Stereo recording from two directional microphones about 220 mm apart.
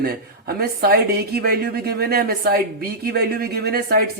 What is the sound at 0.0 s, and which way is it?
Speech, 45° right (ahead or behind).